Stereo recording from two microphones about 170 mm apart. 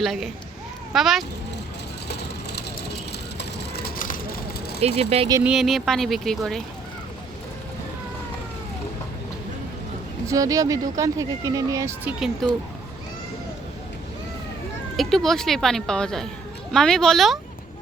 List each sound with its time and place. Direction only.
0.0 s speech: centre (ahead or behind)
2.0 s vehicle: 75° left (ahead or behind); by 4.8 s 55° left (ahead or behind)
4.8 s speech: 35° right (ahead or behind)
5.4 s speech: 5° right (ahead or behind)
10.2 s speech: 20° right (ahead or behind)
12.4 s speech: centre (ahead or behind)
14.9 s speech: centre (ahead or behind)